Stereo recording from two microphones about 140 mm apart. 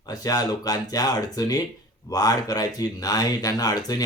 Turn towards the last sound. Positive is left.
turn(degrees=25)  # may be behind; listen again after turning